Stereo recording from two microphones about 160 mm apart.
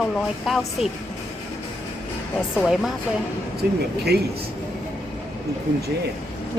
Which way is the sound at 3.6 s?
75° right (ahead or behind).